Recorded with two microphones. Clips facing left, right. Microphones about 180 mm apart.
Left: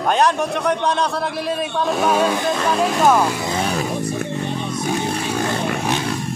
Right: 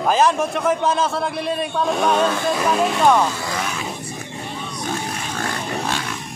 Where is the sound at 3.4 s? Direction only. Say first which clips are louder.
Left 5 dB; 30° left (ahead or behind).